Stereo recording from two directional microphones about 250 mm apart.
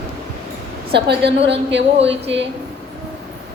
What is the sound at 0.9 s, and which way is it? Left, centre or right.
A woman's voice, right.